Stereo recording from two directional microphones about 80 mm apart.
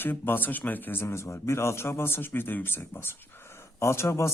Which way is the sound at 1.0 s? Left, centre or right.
Left.